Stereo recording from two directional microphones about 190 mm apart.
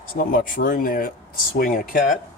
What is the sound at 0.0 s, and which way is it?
Speech, 50° left (ahead or behind).